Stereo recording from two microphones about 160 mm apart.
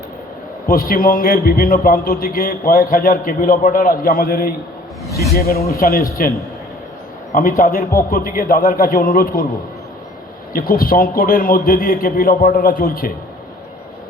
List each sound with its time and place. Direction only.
0.7 s a man's voice: 60° left (ahead or behind)
7.6 s a man's voice: 60° left (ahead or behind)
10.5 s a man's voice: 65° left (ahead or behind)